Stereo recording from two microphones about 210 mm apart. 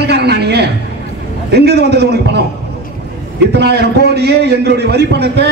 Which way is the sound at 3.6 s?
50° right (ahead or behind).